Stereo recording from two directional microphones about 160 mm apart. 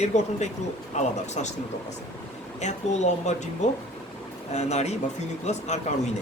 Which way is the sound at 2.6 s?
45° left (ahead or behind).